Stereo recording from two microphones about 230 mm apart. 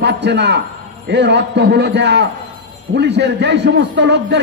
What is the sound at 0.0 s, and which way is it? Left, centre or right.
A man's voice, right.